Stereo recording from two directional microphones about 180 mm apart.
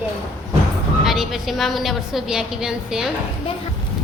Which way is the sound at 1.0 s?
Centre (ahead or behind).